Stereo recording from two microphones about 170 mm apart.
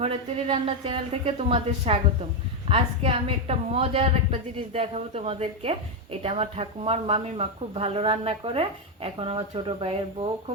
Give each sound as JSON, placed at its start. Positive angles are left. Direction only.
{"t": 0.0, "sound": "a woman's voice", "side_deg": -35}